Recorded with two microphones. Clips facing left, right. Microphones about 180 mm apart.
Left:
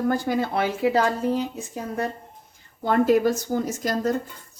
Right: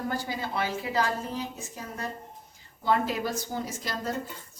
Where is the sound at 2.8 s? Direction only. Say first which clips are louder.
Left 8 dB; 50° left (ahead or behind).